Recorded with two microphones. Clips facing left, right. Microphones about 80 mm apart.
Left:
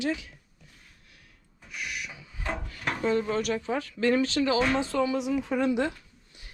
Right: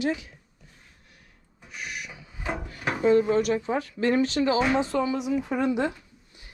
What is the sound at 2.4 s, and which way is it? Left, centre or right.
Wood, centre.